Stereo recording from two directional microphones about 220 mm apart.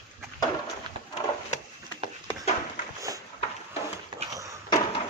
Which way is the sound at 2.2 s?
30° left (ahead or behind).